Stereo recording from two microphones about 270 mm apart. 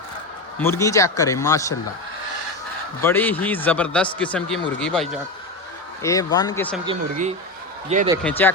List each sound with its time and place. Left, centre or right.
0.6 s speech: centre
3.0 s speech: centre
6.8 s speech: right
8.2 s speech: centre